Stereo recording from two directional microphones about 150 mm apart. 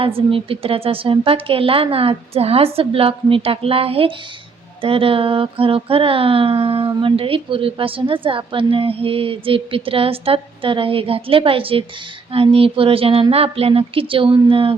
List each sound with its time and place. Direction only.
0.0 s speech: 35° right (ahead or behind)